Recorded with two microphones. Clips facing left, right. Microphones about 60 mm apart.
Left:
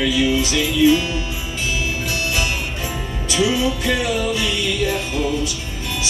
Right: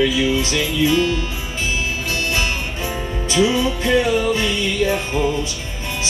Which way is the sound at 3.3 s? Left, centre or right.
Right.